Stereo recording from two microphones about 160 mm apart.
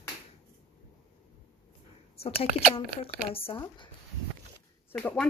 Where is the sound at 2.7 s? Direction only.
35° left (ahead or behind).